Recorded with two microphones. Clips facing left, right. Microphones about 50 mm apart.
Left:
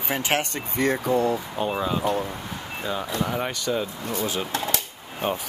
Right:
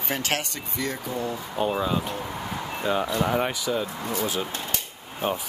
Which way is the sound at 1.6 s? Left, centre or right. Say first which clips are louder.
Right 3 dB; centre.